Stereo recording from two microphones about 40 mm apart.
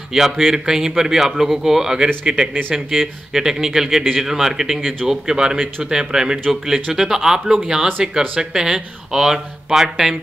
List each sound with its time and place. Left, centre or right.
0.1 s a man's voice: centre; by 2.5 s right
2.7 s a man's voice: centre